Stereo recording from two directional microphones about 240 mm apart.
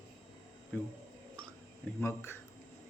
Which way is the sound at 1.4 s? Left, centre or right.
Centre.